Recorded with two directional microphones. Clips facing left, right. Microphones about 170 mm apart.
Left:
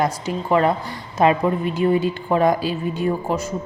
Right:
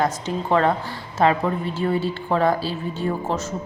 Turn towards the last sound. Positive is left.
turn(degrees=10)  # may be behind; listen again after turning